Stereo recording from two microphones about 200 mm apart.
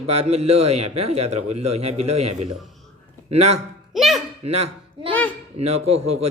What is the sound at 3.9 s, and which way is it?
Speech, centre (ahead or behind).